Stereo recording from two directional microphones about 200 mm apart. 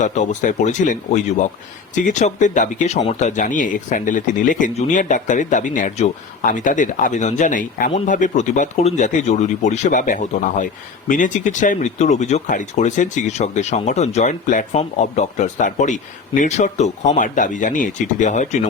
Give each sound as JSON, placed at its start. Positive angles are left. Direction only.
{"t": 0.0, "sound": "speech", "side_deg": 35}